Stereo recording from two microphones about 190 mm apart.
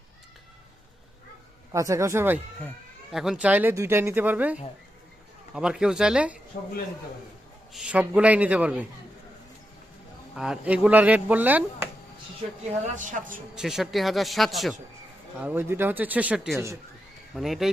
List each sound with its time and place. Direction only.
1.7 s speech: 15° right (ahead or behind)
7.7 s speech: 5° right (ahead or behind)
10.3 s speech: 5° right (ahead or behind)
13.0 s speech: 45° right (ahead or behind)
13.6 s speech: centre (ahead or behind)